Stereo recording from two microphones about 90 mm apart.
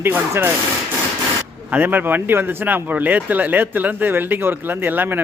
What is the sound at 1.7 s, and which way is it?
Speech, 20° right (ahead or behind).